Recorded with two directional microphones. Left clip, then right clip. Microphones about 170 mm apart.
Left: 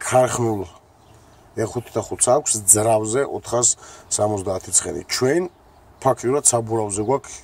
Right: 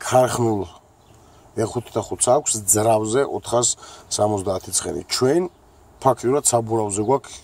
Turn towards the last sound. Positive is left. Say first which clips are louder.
# right 1 dB
turn(degrees=-15)  # may be behind; listen again after turning